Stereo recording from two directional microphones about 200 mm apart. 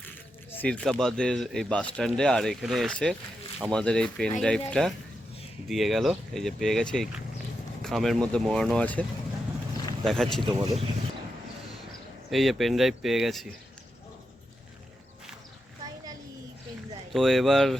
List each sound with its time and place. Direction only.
0.5 s speech: 5° left (ahead or behind)
10.1 s speech: centre (ahead or behind)
10.4 s speech: 25° right (ahead or behind)
12.3 s speech: centre (ahead or behind)
17.1 s speech: centre (ahead or behind)